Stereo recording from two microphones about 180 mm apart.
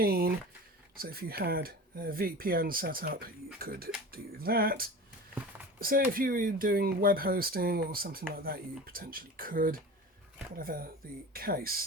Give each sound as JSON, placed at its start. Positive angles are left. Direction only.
{"t": 0.0, "sound": "speech", "side_deg": -55}